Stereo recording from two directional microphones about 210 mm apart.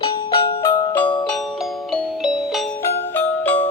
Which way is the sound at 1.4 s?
Centre (ahead or behind).